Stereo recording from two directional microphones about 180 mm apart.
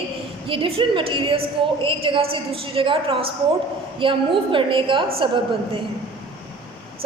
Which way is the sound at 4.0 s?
30° right (ahead or behind).